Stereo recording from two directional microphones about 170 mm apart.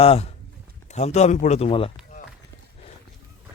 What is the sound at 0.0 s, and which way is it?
Speech, 35° left (ahead or behind).